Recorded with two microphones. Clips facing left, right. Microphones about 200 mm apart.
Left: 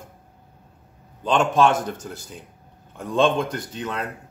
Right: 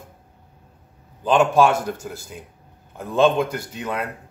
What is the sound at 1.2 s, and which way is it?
Speech, 10° right (ahead or behind).